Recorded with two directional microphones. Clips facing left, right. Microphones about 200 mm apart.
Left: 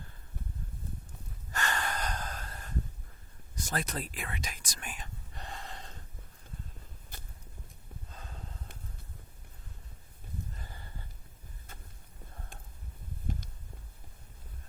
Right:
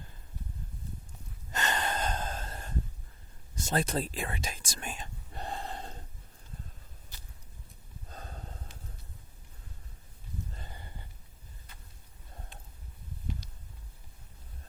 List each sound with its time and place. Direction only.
1.5 s gasp: 20° right (ahead or behind)
3.5 s whispering: 25° right (ahead or behind)
7.1 s vehicle: 55° left (ahead or behind)
8.1 s snort: 40° right (ahead or behind)
10.5 s a sound: 20° right (ahead or behind)
11.7 s vehicle: 45° left (ahead or behind)